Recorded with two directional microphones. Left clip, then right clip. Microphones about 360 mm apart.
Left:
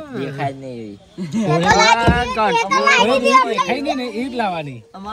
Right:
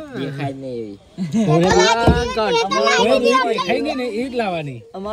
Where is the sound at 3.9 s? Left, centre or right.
Centre.